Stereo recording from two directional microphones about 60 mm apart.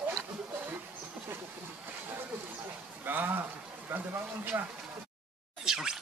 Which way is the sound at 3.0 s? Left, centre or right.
Right.